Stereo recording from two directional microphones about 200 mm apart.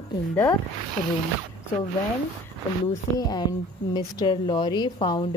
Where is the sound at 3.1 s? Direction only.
20° left (ahead or behind).